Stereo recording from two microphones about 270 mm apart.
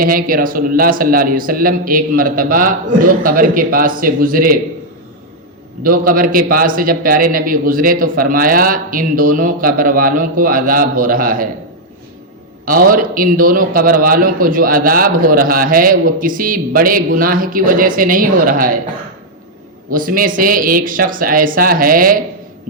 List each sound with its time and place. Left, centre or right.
0.0 s a man's voice: right
5.8 s a man's voice: right
12.6 s a man's voice: right
19.9 s a man's voice: right